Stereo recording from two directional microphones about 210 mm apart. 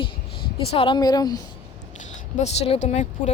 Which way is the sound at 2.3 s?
35° left (ahead or behind).